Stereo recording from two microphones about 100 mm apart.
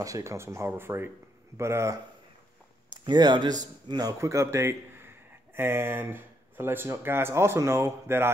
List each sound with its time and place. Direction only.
0.0 s speech: 30° right (ahead or behind)
2.9 s speech: 45° right (ahead or behind); by 8.3 s 25° right (ahead or behind)